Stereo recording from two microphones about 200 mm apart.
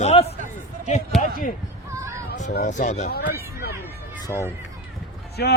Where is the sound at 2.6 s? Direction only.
35° left (ahead or behind).